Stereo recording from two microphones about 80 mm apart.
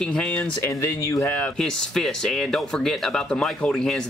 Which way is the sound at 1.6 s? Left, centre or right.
Centre.